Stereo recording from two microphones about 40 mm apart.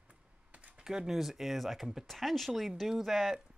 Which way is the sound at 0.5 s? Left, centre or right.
Right.